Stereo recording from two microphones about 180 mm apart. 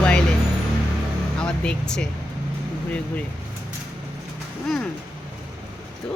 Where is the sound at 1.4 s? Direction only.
5° left (ahead or behind).